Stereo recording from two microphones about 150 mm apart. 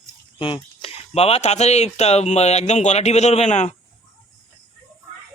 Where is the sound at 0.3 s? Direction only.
35° left (ahead or behind).